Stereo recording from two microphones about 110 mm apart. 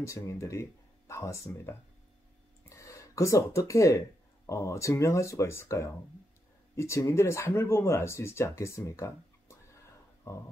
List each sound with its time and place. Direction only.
0.0 s speech: 25° left (ahead or behind)